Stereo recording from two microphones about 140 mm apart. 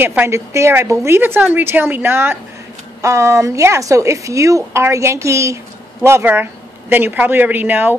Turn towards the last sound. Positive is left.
turn(degrees=-15)  # may be behind; listen again after turning